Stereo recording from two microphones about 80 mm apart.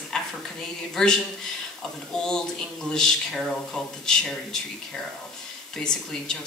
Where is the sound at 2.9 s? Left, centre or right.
Centre.